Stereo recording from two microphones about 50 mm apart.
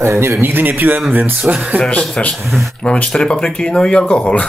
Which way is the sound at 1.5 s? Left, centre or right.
Right.